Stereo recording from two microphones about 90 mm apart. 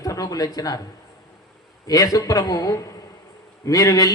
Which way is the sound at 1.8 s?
40° left (ahead or behind).